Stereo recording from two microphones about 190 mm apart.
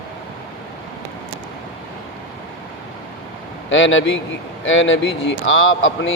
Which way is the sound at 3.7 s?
80° left.